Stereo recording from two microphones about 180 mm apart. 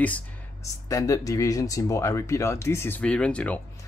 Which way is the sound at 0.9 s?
20° left (ahead or behind).